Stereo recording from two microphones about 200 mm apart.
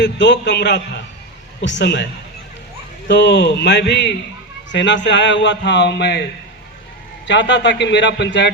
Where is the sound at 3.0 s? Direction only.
60° left (ahead or behind).